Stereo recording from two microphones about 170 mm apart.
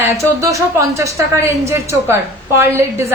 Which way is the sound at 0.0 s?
15° right (ahead or behind).